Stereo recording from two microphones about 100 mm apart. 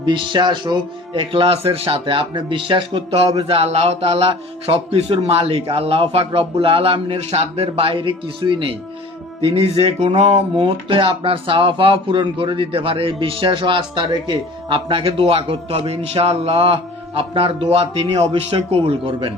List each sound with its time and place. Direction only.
0.0 s speech: 55° right (ahead or behind)
9.4 s speech: 80° right; by 19.3 s 65° right (ahead or behind)